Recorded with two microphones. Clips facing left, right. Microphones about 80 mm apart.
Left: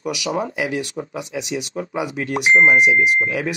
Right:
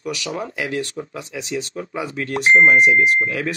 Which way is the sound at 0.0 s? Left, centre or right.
Centre.